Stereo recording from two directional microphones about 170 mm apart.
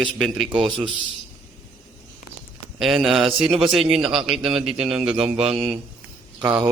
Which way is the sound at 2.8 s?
Centre (ahead or behind).